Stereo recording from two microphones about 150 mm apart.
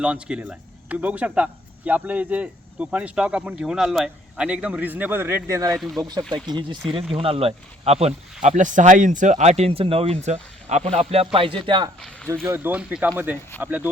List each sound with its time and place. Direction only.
0.0 s speech: 5° right (ahead or behind); by 11.9 s 35° right (ahead or behind)
11.9 s speech: 5° left (ahead or behind)
12.5 s speech: 10° right (ahead or behind)